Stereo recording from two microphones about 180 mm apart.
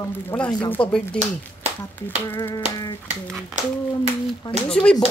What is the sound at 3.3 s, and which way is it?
Speech, centre (ahead or behind).